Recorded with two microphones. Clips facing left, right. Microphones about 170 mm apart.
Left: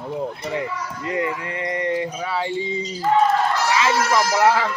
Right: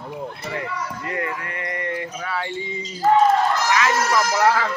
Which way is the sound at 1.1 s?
20° left (ahead or behind).